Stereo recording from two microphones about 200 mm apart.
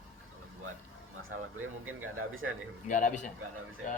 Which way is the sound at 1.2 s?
90° right.